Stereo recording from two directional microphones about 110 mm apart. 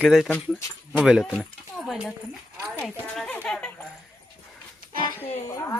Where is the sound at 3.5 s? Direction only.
10° left (ahead or behind).